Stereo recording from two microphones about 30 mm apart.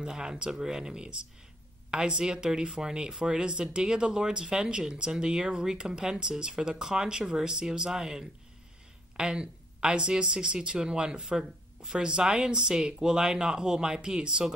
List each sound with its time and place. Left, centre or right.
0.0 s speech: right